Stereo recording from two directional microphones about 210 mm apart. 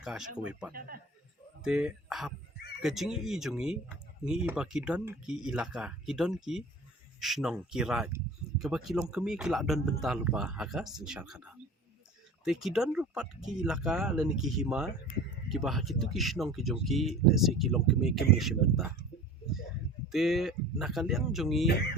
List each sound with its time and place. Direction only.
0.0 s speech: centre (ahead or behind)
0.7 s a man's voice: 45° right (ahead or behind)
1.6 s speech: 5° right (ahead or behind)
20.1 s speech: centre (ahead or behind)
21.7 s a sound: 55° left (ahead or behind)